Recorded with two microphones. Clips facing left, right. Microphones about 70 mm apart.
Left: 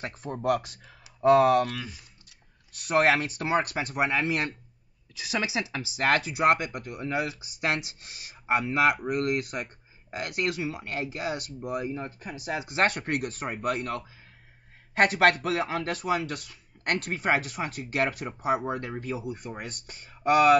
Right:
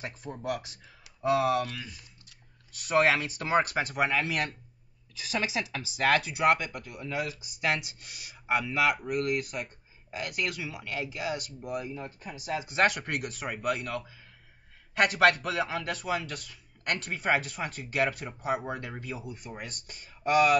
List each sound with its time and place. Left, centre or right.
0.0 s speech: left
4.2 s speech: left
5.9 s speech: left